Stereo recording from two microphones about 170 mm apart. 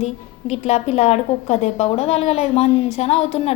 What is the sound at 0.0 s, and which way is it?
A woman's voice, 40° left (ahead or behind).